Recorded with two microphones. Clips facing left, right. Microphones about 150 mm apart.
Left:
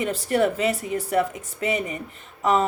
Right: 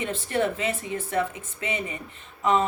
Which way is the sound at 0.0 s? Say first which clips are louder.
Left 4 dB; 40° left (ahead or behind).